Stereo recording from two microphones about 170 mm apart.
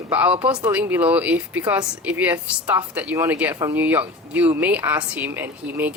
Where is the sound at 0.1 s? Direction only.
10° right (ahead or behind).